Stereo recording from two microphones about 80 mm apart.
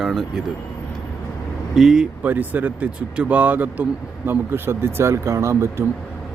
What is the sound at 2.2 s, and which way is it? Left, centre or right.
Speech, right.